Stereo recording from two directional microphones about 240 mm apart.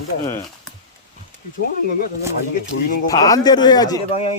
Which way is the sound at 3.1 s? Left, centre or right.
Centre.